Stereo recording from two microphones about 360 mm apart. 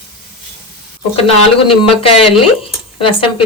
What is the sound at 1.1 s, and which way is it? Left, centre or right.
Speech, centre.